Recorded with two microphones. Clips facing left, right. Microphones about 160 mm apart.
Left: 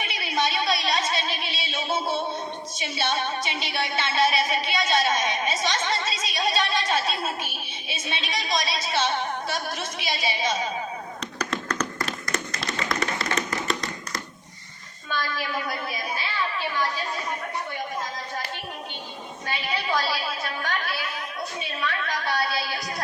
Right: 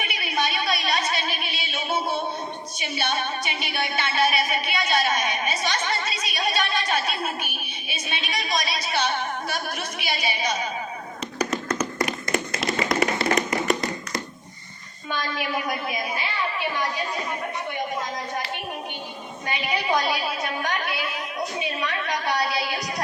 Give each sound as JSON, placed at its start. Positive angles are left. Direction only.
{"t": 0.0, "sound": "a sound", "side_deg": 25}
{"t": 2.7, "sound": "music", "side_deg": 25}
{"t": 11.3, "sound": "tap", "side_deg": -10}
{"t": 11.9, "sound": "tap", "side_deg": -25}
{"t": 15.1, "sound": "a woman's voice", "side_deg": -15}
{"t": 19.5, "sound": "a woman's voice", "side_deg": -15}
{"t": 21.8, "sound": "a sound", "side_deg": -20}